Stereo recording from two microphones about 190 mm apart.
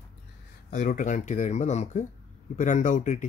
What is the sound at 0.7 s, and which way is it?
Speech, 40° left (ahead or behind).